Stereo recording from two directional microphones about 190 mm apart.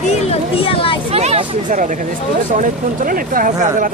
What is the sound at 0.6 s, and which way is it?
Speech, 30° left (ahead or behind).